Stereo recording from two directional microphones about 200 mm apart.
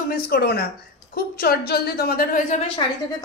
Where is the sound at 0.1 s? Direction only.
50° left (ahead or behind).